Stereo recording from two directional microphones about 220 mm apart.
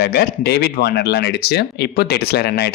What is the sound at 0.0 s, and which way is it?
Speech, 45° left (ahead or behind).